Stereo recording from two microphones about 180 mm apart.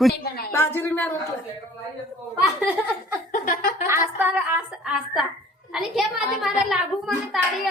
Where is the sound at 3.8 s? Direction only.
10° right (ahead or behind).